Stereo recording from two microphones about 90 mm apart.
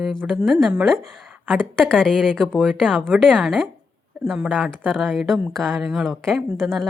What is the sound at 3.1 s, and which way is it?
Speech, 5° left (ahead or behind).